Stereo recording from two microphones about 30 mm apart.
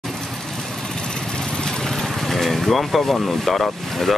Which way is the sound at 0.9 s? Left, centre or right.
Left.